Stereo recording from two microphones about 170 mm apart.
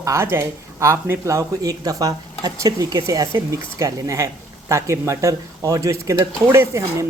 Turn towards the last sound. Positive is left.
turn(degrees=-15)  # may be behind; listen again after turning